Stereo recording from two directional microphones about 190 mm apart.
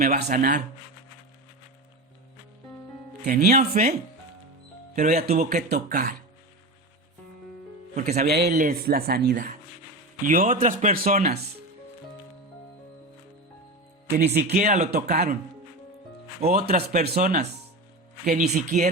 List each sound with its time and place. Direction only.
0.0 s a woman's voice: 45° right (ahead or behind)
3.2 s a woman's voice: 50° right (ahead or behind)
4.9 s speech: 40° right (ahead or behind)
5.7 s a woman's voice: 50° right (ahead or behind)
7.9 s a woman's voice: 45° right (ahead or behind)
8.5 s a woman's voice: 45° right (ahead or behind)
14.1 s speech: 55° right (ahead or behind)
14.6 s speech: 40° right (ahead or behind)
14.9 s a woman's voice: 50° right (ahead or behind)
16.4 s a woman's voice: 50° right (ahead or behind)
18.3 s speech: 40° right (ahead or behind)